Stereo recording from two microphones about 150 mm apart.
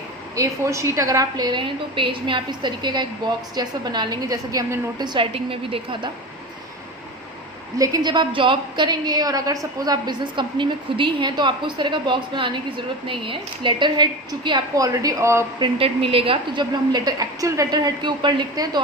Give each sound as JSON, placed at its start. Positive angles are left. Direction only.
{"t": 0.3, "sound": "a woman's voice", "side_deg": -20}
{"t": 7.8, "sound": "a woman's voice", "side_deg": -25}
{"t": 15.5, "sound": "a woman's voice", "side_deg": -35}